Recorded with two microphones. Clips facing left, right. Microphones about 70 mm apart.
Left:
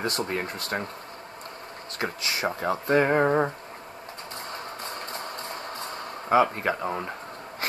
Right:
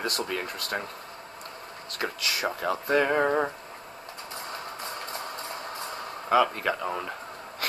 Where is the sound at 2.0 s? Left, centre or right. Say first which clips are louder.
Left 1 dB; left.